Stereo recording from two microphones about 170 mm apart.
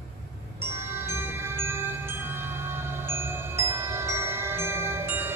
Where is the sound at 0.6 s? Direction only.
15° right (ahead or behind).